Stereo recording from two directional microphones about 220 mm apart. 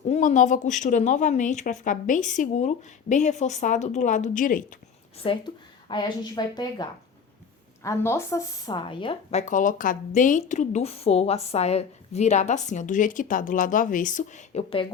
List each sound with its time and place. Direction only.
0.1 s a woman's voice: 35° left (ahead or behind)
5.9 s a woman's voice: 20° left (ahead or behind)
7.9 s a woman's voice: 10° left (ahead or behind)
9.5 s a woman's voice: 35° left (ahead or behind)